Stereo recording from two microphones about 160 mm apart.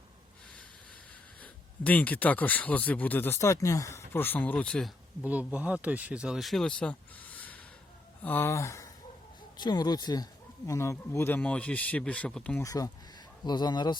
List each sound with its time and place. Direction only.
1.4 s speech: 10° left (ahead or behind)
5.2 s speech: 10° right (ahead or behind); by 12.6 s 5° left (ahead or behind)
12.6 s speech: 20° left (ahead or behind)